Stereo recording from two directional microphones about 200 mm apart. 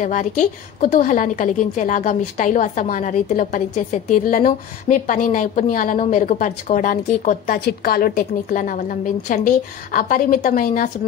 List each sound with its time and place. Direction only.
0.0 s a woman's voice: 40° left (ahead or behind)